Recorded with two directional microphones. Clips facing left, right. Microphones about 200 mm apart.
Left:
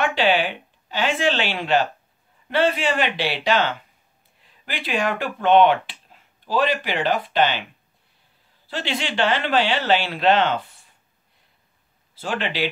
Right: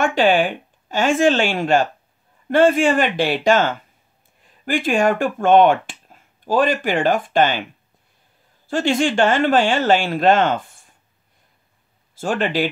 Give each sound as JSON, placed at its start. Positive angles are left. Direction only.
{"t": 0.0, "sound": "speech", "side_deg": -45}
{"t": 8.6, "sound": "speech", "side_deg": -45}
{"t": 12.2, "sound": "speech", "side_deg": -50}